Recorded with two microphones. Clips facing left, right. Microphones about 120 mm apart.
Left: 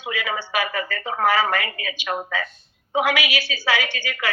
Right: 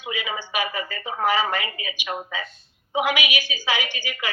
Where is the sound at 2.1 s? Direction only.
45° left (ahead or behind).